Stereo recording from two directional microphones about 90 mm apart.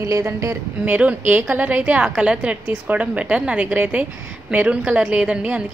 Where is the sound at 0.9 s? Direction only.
20° right (ahead or behind).